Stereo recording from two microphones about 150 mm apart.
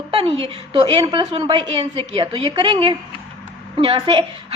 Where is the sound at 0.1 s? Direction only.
40° right (ahead or behind).